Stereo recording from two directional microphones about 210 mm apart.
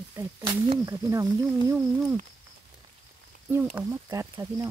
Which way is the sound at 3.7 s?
15° right (ahead or behind).